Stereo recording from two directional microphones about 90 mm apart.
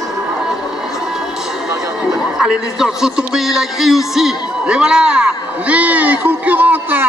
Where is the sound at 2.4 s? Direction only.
5° right (ahead or behind).